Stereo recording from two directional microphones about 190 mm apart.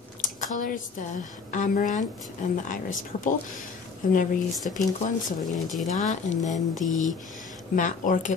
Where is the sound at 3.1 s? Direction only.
35° left (ahead or behind).